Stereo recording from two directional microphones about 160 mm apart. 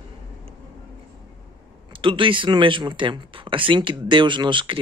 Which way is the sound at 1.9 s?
30° right (ahead or behind).